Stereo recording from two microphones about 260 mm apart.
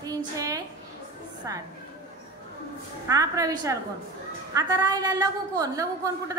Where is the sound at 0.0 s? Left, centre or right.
Centre.